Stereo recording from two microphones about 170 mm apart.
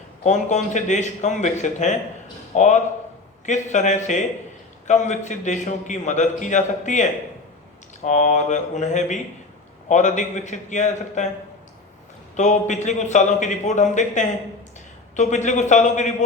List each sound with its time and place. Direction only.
0.3 s a man's voice: 45° left (ahead or behind)
12.4 s a man's voice: 45° left (ahead or behind)